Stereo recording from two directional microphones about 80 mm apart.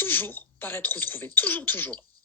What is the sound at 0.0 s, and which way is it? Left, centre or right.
Speech, left.